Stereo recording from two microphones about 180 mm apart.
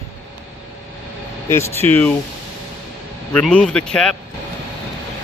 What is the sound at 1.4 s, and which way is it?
Speech, 15° left (ahead or behind).